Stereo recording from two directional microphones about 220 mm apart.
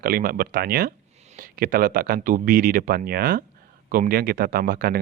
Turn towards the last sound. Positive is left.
turn(degrees=-40)  # may be behind; listen again after turning